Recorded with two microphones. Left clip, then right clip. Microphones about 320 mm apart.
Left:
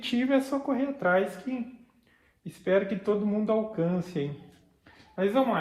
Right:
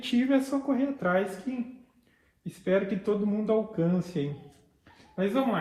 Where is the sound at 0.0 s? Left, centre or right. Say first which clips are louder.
Even; left.